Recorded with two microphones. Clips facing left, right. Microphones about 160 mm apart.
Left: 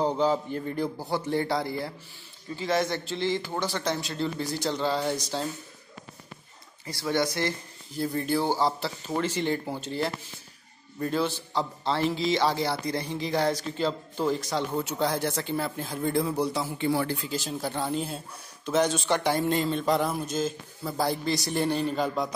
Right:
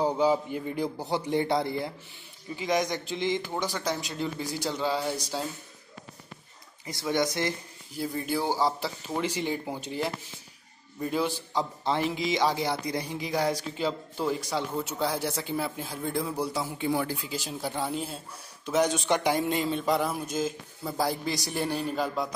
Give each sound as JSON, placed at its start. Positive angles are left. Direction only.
{"t": 0.0, "sound": "a man's voice", "side_deg": -10}
{"t": 6.9, "sound": "speech", "side_deg": -20}
{"t": 8.0, "sound": "a man's voice", "side_deg": -10}